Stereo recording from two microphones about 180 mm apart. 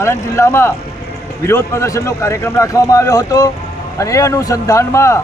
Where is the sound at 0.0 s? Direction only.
15° left (ahead or behind).